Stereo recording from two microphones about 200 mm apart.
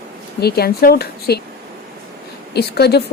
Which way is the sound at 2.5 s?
55° left (ahead or behind).